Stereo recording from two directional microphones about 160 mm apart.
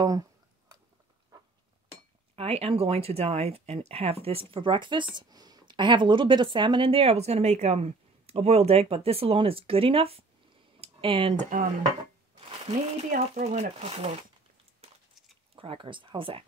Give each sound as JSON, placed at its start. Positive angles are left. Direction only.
{"t": 2.3, "sound": "speech", "side_deg": -40}
{"t": 10.8, "sound": "tick", "side_deg": -35}
{"t": 12.4, "sound": "a sound", "side_deg": -35}
{"t": 13.1, "sound": "speech", "side_deg": -45}
{"t": 14.8, "sound": "a sound", "side_deg": -40}
{"t": 15.5, "sound": "speech", "side_deg": -35}